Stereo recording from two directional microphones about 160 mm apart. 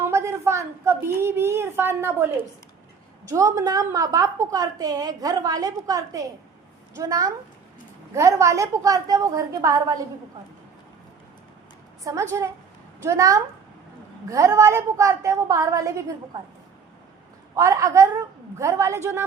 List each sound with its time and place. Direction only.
0.0 s a woman's voice: 15° right (ahead or behind)
12.0 s a woman's voice: 20° right (ahead or behind)
17.5 s a woman's voice: 20° right (ahead or behind)